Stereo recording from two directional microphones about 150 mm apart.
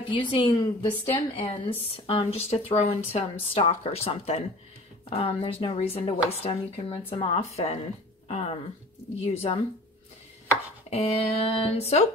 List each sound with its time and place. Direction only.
0.1 s a woman's voice: 35° left (ahead or behind)
10.9 s speech: 45° left (ahead or behind)